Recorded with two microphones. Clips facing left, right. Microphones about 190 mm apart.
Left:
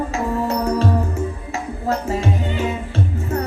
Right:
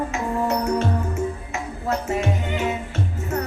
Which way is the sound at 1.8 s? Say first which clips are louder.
Left 2 dB; 35° left (ahead or behind).